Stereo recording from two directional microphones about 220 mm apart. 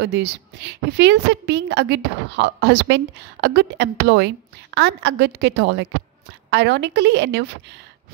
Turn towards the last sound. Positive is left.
turn(degrees=-50)  # may be behind; listen again after turning